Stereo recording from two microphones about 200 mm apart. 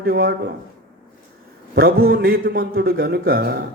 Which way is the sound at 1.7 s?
45° right (ahead or behind).